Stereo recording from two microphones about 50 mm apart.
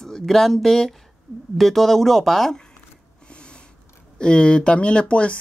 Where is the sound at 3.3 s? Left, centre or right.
Left.